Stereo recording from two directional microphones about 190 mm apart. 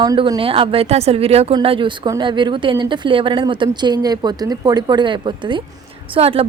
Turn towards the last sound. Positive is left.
turn(degrees=-30)  # may be behind; listen again after turning